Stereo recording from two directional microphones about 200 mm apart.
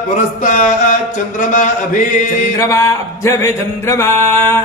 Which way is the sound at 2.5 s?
15° left (ahead or behind).